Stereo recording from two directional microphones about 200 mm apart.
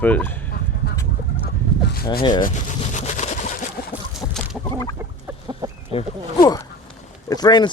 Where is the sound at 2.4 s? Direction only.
40° left (ahead or behind).